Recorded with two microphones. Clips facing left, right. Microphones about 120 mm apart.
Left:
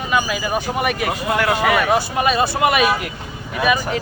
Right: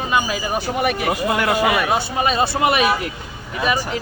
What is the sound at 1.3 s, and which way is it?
A man's voice, 20° right (ahead or behind).